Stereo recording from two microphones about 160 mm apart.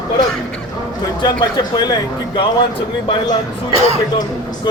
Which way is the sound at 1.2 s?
25° left (ahead or behind).